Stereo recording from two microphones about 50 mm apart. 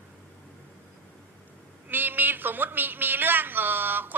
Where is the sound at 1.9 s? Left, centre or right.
Right.